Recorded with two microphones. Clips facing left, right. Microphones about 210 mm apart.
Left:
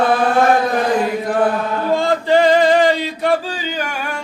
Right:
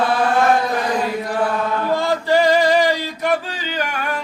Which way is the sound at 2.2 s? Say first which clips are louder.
Left 3 dB; 20° left (ahead or behind).